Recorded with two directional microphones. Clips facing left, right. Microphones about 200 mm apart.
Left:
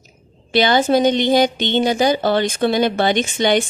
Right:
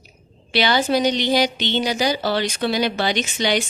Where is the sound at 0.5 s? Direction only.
50° left (ahead or behind).